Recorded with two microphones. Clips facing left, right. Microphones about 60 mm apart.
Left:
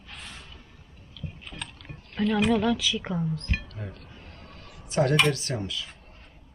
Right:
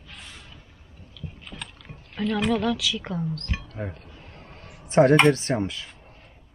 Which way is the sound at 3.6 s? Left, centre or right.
Right.